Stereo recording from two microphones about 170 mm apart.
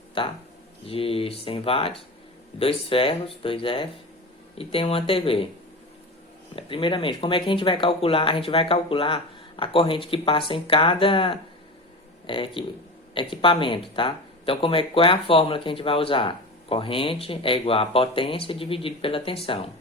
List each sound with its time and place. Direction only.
0.2 s speech: 30° left (ahead or behind)
6.6 s speech: 30° left (ahead or behind)